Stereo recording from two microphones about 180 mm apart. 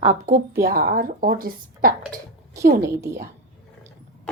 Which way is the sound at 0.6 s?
55° right (ahead or behind).